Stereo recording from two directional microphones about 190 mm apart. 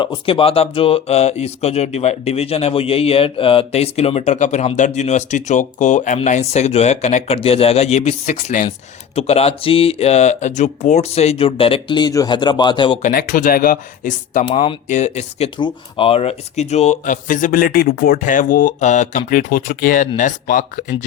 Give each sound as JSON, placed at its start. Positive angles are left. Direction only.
{"t": 0.0, "sound": "speech", "side_deg": 25}
{"t": 13.0, "sound": "speech", "side_deg": 45}